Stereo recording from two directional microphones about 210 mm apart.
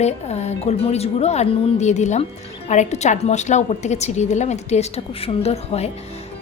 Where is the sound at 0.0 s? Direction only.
30° left (ahead or behind).